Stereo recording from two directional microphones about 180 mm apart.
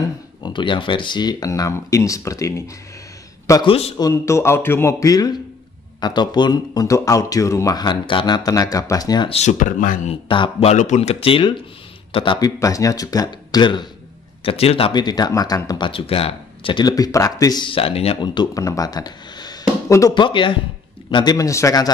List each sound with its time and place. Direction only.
0.4 s a man's voice: 25° left (ahead or behind)
9.3 s speech: 40° left (ahead or behind)
10.2 s speech: 30° left (ahead or behind)